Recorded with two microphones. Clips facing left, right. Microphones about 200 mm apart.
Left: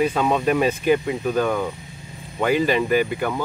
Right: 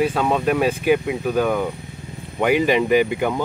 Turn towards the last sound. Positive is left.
turn(degrees=-15)  # may be behind; listen again after turning